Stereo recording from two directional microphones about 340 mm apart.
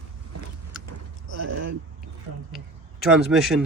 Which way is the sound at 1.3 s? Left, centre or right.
Right.